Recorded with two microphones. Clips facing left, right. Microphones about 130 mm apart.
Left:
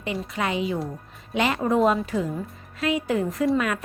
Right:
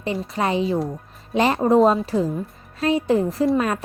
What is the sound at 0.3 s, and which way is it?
Speech, 35° right (ahead or behind).